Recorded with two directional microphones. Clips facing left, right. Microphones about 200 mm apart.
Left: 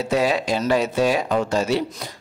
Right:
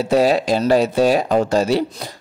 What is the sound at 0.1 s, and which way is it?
Speech, 35° right (ahead or behind).